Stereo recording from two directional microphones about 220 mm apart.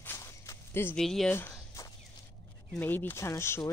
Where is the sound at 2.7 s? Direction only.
10° left (ahead or behind).